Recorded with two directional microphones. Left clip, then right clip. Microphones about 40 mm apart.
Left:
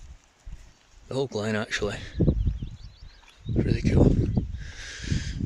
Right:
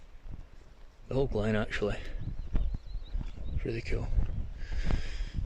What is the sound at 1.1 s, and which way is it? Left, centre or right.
Speech, left.